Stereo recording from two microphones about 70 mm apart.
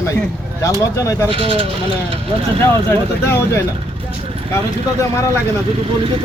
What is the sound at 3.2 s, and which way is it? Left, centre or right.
Speech, left.